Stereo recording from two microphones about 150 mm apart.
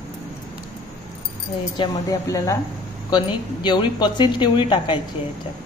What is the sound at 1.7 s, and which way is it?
A woman's voice, 25° left (ahead or behind).